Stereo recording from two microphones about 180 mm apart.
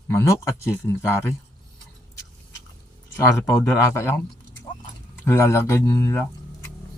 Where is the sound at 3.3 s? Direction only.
15° left (ahead or behind).